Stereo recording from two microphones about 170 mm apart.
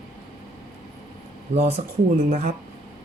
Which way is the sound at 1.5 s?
40° right (ahead or behind).